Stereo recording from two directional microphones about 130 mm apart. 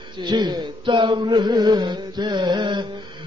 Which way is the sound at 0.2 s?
35° right (ahead or behind).